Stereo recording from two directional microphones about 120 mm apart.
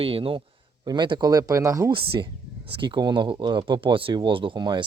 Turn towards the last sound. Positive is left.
turn(degrees=-40)  # may be behind; listen again after turning